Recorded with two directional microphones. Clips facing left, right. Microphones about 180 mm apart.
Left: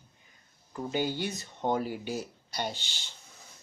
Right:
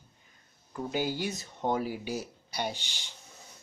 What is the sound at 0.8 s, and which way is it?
Speech, 5° right (ahead or behind).